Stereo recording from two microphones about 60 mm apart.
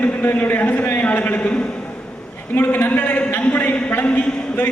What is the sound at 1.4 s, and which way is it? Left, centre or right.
Speech, centre.